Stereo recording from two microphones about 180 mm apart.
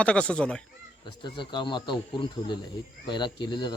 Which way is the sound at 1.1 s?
25° left (ahead or behind).